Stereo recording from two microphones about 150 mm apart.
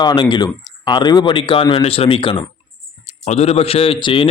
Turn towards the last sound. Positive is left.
turn(degrees=35)  # may be behind; listen again after turning